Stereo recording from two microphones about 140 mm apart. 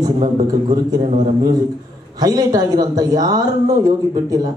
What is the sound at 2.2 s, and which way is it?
A man's voice, 25° right (ahead or behind).